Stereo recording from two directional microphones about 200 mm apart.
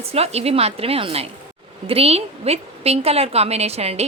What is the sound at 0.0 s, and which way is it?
A woman's voice, 30° right (ahead or behind).